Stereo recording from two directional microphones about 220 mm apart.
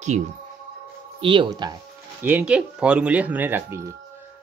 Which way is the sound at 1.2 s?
20° right (ahead or behind).